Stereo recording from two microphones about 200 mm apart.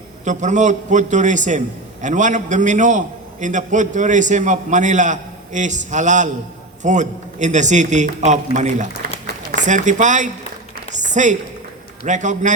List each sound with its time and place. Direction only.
0.3 s a man's voice: 40° right (ahead or behind)
11.0 s a sound: 40° right (ahead or behind)
12.0 s a man's voice: 35° right (ahead or behind)